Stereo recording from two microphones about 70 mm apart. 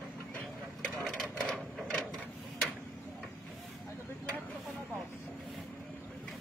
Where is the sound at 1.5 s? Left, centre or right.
Centre.